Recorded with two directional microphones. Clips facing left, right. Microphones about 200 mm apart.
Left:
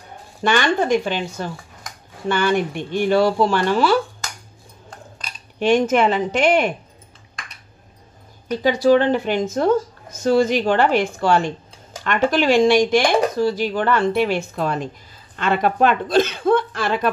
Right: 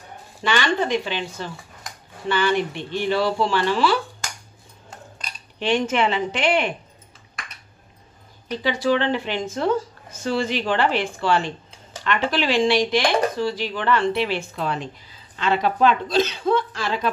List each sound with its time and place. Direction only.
0.4 s speech: 50° left (ahead or behind)
5.6 s speech: 45° left (ahead or behind)
8.6 s a woman's voice: 45° left (ahead or behind)